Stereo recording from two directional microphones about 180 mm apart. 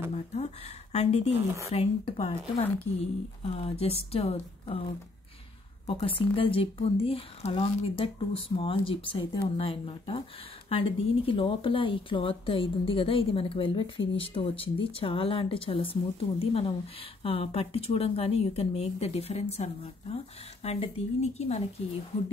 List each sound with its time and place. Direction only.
0.1 s speech: 40° left (ahead or behind)